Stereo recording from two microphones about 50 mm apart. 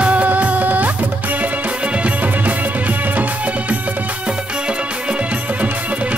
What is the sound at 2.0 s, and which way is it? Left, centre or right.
Music, right.